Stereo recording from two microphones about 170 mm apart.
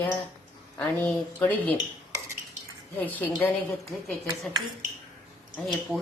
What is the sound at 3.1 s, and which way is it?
Speech, 10° left (ahead or behind).